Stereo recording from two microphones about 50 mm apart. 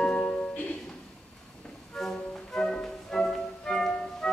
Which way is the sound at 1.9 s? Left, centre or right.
Centre.